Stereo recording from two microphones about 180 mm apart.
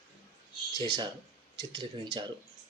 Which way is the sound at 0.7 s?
25° right (ahead or behind).